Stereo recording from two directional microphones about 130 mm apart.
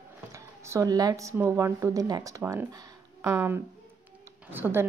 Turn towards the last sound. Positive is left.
turn(degrees=-15)  # may be behind; listen again after turning